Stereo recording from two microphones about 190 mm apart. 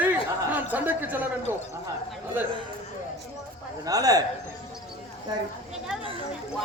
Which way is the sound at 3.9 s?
20° right (ahead or behind).